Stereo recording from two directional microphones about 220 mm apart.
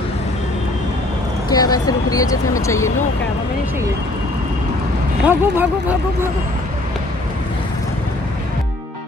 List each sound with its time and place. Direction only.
1.5 s speech: 15° left (ahead or behind)
5.2 s speech: 10° right (ahead or behind)